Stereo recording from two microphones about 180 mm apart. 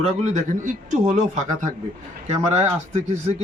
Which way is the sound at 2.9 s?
40° right (ahead or behind).